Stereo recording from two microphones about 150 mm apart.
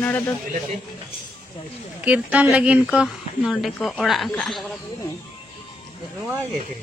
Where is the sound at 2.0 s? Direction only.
10° right (ahead or behind).